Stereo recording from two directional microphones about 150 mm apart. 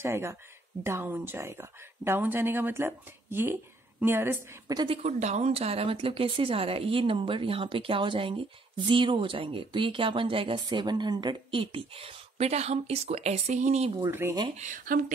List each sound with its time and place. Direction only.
0.0 s speech: 15° right (ahead or behind)
4.7 s speech: 40° right (ahead or behind)
14.6 s speech: 60° right (ahead or behind)